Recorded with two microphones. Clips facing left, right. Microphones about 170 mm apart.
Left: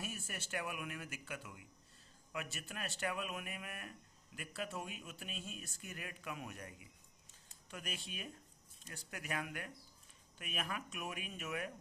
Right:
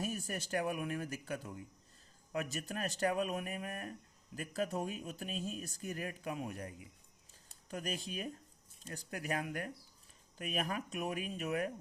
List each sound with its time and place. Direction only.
0.0 s speech: 35° right (ahead or behind)